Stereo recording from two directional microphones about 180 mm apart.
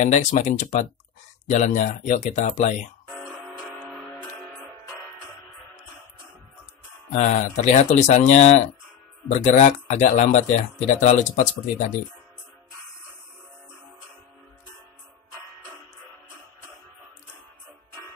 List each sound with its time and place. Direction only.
0.0 s speech: 40° left (ahead or behind)
3.7 s music: 10° left (ahead or behind)
7.1 s speech: 40° left (ahead or behind)